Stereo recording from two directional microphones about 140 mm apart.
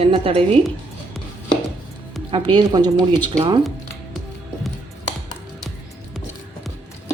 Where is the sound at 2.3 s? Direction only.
35° right (ahead or behind).